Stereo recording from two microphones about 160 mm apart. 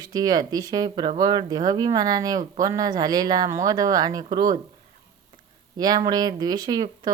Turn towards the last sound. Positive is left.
turn(degrees=-25)  # may be behind; listen again after turning